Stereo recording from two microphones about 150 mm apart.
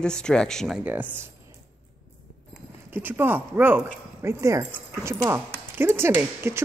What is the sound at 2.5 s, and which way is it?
Speech, 15° right (ahead or behind).